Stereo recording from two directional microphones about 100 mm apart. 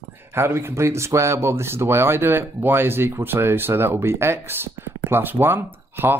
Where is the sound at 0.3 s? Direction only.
25° right (ahead or behind).